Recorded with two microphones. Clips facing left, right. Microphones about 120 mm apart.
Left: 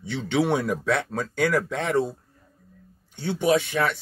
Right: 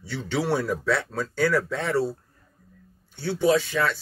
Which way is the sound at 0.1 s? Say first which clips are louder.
Left 3 dB; 20° left (ahead or behind).